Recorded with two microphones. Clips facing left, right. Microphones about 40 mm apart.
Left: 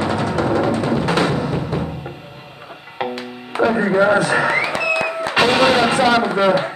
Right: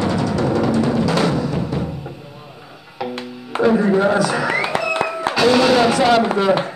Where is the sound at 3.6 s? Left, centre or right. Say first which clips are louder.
Right 1 dB; left.